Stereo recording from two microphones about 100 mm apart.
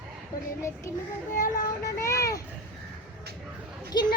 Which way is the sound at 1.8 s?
30° left (ahead or behind).